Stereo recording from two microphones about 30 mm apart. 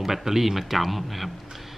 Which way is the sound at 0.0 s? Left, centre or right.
Centre.